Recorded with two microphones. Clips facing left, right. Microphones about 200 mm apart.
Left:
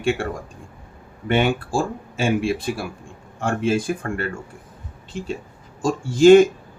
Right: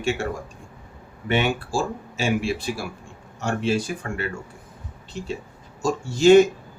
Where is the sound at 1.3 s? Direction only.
50° left (ahead or behind).